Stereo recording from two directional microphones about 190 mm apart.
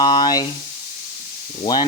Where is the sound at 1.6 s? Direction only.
25° left (ahead or behind).